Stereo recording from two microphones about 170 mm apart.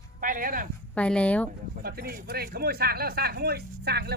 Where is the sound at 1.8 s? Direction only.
60° right (ahead or behind).